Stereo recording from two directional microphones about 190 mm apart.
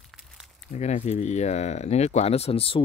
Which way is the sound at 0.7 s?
35° left (ahead or behind).